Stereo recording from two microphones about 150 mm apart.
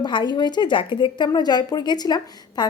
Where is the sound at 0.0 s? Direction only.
30° left (ahead or behind).